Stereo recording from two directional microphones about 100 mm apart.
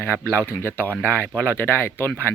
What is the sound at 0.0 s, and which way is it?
Speech, 20° left (ahead or behind).